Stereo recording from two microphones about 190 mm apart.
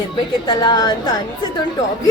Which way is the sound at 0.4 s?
20° left (ahead or behind).